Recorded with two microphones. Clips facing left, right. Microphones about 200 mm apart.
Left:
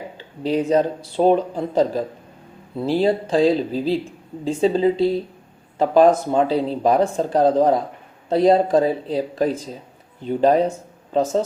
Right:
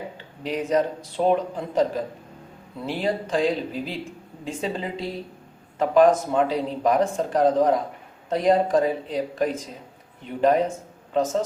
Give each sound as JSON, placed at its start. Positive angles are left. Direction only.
{"t": 0.2, "sound": "speech", "side_deg": 30}